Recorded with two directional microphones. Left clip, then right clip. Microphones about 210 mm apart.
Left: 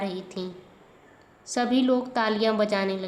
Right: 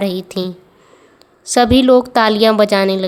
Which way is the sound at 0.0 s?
45° right (ahead or behind).